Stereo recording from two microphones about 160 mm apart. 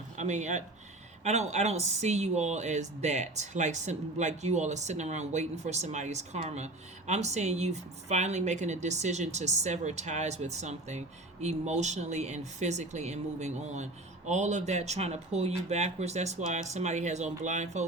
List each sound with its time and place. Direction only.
0.2 s a woman's voice: 45° right (ahead or behind)